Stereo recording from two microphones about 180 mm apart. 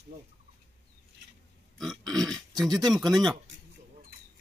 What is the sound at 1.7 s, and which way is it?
Pig, centre (ahead or behind).